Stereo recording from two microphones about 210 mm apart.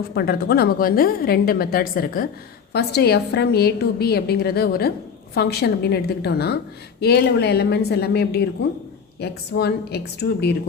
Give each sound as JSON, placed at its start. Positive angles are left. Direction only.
{"t": 0.1, "sound": "a woman's voice", "side_deg": 50}